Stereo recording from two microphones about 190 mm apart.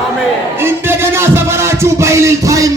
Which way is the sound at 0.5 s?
10° right (ahead or behind).